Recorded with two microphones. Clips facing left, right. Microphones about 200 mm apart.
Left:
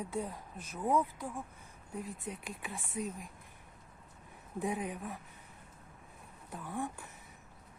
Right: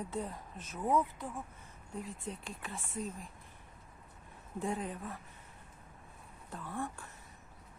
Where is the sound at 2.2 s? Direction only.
15° left (ahead or behind).